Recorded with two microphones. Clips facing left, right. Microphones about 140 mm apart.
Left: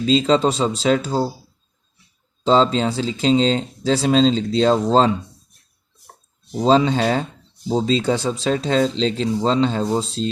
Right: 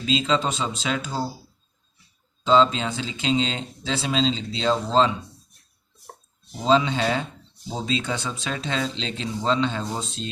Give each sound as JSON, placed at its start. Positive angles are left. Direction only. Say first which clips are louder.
{"t": 0.0, "sound": "speech", "louder": "left 7 dB", "side_deg": 35}
{"t": 2.4, "sound": "speech", "louder": "left 3 dB", "side_deg": 35}
{"t": 6.6, "sound": "speech", "louder": "left 5 dB", "side_deg": 40}